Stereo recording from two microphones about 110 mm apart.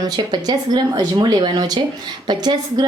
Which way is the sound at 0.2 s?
40° right (ahead or behind).